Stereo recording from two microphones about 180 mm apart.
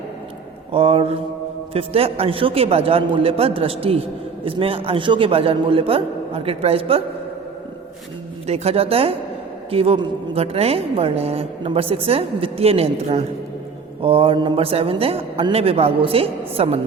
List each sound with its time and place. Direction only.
0.7 s a woman's voice: 30° right (ahead or behind)
8.4 s a woman's voice: 35° right (ahead or behind)